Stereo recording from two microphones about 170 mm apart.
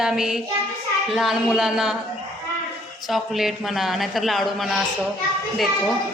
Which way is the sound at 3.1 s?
Centre (ahead or behind).